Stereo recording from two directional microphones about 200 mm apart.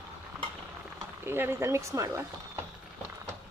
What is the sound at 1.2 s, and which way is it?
Speech, 10° right (ahead or behind).